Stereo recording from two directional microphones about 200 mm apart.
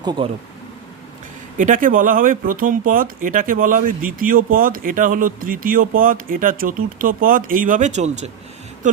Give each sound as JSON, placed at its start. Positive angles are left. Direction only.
{"t": 0.0, "sound": "speech", "side_deg": -20}
{"t": 1.5, "sound": "speech", "side_deg": -40}